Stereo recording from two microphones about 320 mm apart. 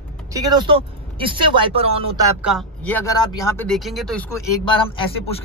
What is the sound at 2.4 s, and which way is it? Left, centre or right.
Speech, centre.